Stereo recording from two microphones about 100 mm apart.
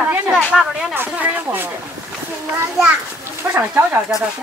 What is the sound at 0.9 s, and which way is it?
Speech, 20° right (ahead or behind).